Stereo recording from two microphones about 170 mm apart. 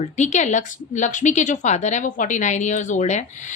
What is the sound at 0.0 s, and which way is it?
Speech, 45° left (ahead or behind).